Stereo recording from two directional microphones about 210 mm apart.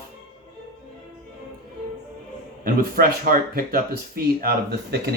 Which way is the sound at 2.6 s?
45° right (ahead or behind).